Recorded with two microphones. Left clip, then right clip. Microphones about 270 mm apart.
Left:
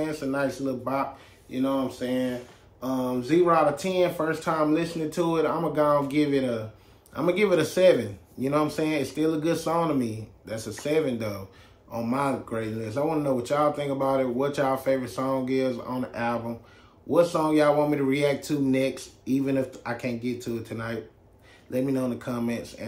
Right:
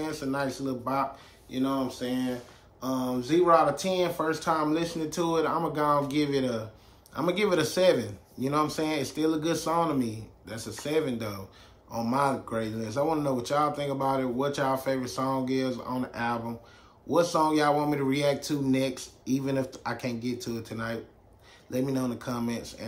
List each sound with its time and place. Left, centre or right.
0.0 s speech: centre